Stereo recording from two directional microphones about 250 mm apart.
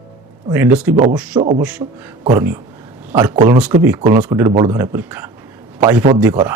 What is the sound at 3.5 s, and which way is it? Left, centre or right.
A man's voice, centre.